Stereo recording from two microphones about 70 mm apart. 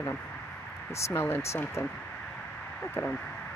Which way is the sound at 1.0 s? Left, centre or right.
Left.